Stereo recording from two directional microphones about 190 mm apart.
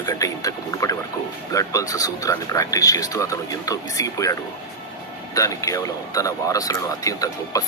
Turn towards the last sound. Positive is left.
turn(degrees=20)  # may be behind; listen again after turning